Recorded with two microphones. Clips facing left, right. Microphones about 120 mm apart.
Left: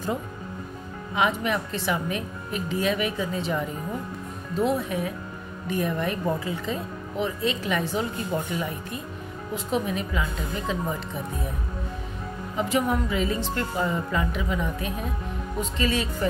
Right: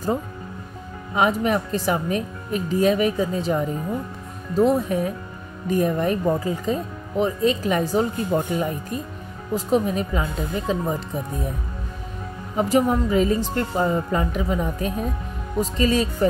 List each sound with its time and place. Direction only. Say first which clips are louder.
1.1 s speech: right 4 dB; 40° right (ahead or behind)
12.5 s speech: right 5 dB; 40° right (ahead or behind)